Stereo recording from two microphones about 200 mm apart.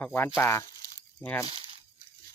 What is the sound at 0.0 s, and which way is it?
Speech, 10° left (ahead or behind).